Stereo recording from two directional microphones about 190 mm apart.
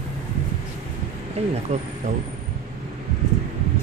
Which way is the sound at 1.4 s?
35° right (ahead or behind).